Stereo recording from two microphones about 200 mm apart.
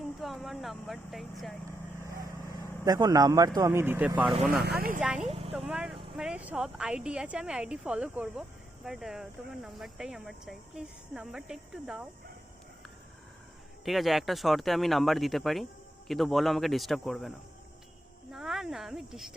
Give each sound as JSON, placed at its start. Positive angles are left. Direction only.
{"t": 0.2, "sound": "speech", "side_deg": 0}
{"t": 2.8, "sound": "speech", "side_deg": -20}
{"t": 4.6, "sound": "speech", "side_deg": -50}
{"t": 4.9, "sound": "speech", "side_deg": -5}
{"t": 5.3, "sound": "a sound", "side_deg": -30}
{"t": 5.5, "sound": "speech", "side_deg": -5}
{"t": 13.8, "sound": "speech", "side_deg": 0}